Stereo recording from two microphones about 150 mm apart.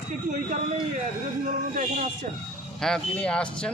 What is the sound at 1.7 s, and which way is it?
Speech, 55° right (ahead or behind).